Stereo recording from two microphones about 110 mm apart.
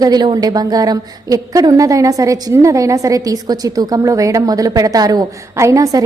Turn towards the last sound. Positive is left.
turn(degrees=-30)  # may be behind; listen again after turning